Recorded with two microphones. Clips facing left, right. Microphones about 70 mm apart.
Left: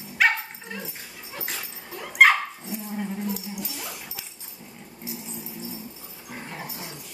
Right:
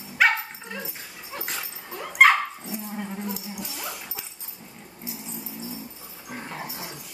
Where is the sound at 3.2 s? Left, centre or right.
Centre.